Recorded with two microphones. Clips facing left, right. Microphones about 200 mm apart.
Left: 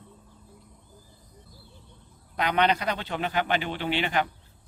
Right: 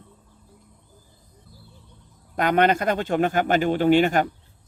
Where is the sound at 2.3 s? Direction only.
50° right (ahead or behind).